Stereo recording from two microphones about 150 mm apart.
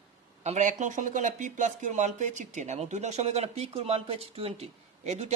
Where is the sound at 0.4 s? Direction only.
55° right (ahead or behind).